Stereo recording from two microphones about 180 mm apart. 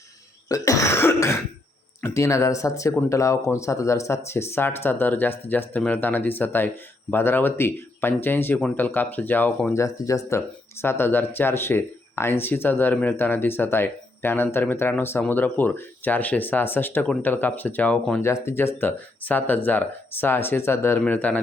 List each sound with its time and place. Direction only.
0.4 s throat clearing: 20° left (ahead or behind)
2.0 s speech: 15° left (ahead or behind)